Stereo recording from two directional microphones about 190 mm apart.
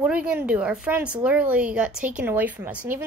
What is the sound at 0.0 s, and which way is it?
A woman's voice, 5° right (ahead or behind).